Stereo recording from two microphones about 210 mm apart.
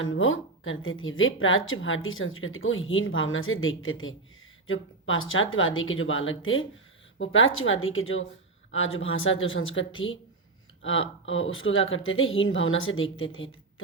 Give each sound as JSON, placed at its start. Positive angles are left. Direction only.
{"t": 0.0, "sound": "a woman's voice", "side_deg": 70}
{"t": 11.3, "sound": "a woman's voice", "side_deg": 70}